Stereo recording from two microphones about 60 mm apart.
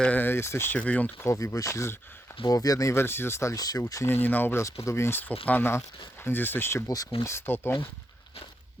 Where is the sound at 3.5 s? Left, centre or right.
Left.